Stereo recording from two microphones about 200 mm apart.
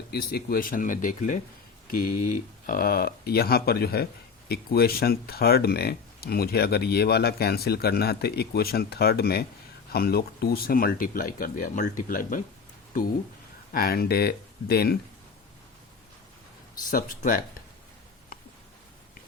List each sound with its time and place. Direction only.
0.1 s speech: 50° left (ahead or behind)
2.6 s speech: 45° left (ahead or behind)
13.7 s speech: 50° left (ahead or behind)
16.9 s speech: 40° left (ahead or behind)